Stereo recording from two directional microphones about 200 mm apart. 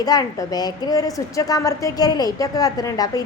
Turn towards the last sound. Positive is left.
turn(degrees=20)  # may be behind; listen again after turning